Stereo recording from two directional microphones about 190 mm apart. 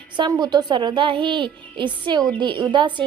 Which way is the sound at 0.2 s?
20° right (ahead or behind).